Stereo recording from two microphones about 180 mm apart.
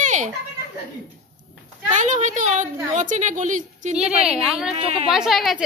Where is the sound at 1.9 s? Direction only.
40° right (ahead or behind).